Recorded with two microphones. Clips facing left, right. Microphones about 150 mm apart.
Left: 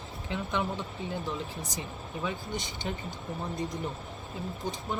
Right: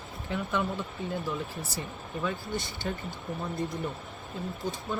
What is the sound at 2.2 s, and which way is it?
Speech, 20° left (ahead or behind).